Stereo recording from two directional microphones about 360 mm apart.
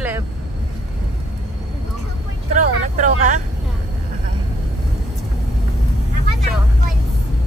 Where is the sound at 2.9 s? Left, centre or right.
Right.